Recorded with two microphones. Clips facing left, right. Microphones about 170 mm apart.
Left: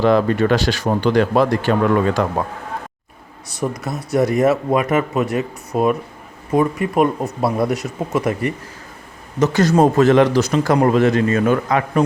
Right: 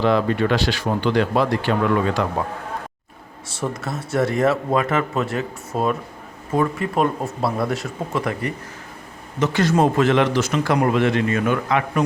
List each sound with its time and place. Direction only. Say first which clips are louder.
0.0 s a man's voice: left 4 dB; 45° left (ahead or behind)
3.6 s speech: left 3 dB; 15° left (ahead or behind)
9.4 s a man's voice: left 4 dB; 40° left (ahead or behind)